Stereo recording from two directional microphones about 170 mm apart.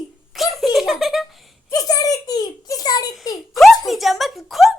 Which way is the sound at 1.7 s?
20° left (ahead or behind).